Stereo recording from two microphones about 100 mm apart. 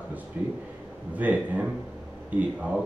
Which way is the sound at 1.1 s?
15° right (ahead or behind).